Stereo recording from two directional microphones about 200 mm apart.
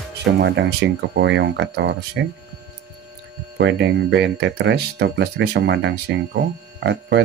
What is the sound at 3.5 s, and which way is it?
Speech, 65° right (ahead or behind).